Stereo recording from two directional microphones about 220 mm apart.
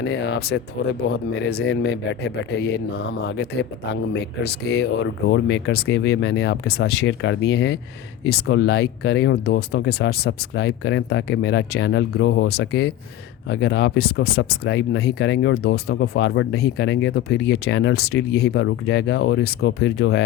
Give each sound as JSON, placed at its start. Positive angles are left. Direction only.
{"t": 0.0, "sound": "speech", "side_deg": 50}